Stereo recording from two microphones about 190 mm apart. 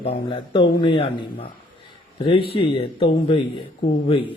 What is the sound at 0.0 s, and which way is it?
A man's voice, 30° left (ahead or behind).